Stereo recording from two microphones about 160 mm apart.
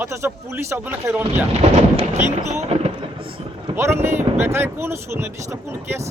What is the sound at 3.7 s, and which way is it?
Speech, 15° right (ahead or behind).